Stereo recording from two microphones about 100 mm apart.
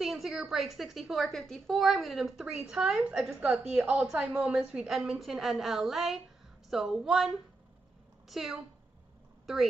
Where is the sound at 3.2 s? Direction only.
15° right (ahead or behind).